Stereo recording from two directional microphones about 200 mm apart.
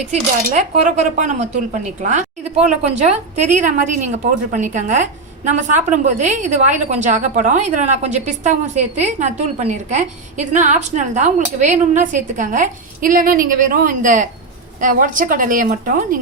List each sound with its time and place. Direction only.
0.1 s a woman's voice: 35° right (ahead or behind)